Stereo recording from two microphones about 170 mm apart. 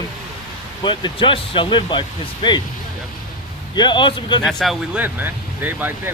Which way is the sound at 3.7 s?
25° left (ahead or behind).